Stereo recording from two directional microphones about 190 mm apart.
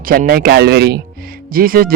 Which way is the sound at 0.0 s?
50° right (ahead or behind).